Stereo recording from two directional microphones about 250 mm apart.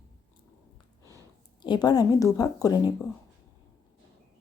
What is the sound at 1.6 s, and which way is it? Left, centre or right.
A woman's voice, centre.